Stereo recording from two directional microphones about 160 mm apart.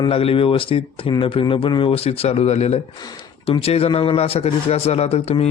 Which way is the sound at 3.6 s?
35° left (ahead or behind).